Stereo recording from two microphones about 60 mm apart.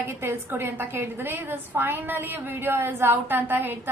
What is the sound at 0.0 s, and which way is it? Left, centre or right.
A woman's voice, right.